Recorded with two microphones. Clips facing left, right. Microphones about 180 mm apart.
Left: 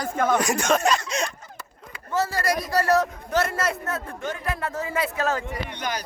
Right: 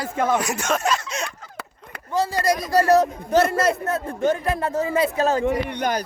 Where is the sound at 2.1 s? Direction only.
15° right (ahead or behind).